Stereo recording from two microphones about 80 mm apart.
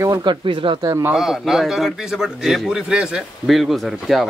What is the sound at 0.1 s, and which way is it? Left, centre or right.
Speech, right.